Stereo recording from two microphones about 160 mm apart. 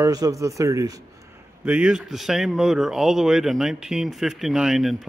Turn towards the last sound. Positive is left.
turn(degrees=0)  # may be behind; listen again after turning